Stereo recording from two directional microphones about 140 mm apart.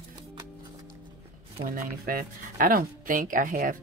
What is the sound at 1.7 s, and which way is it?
Speech, 90° right.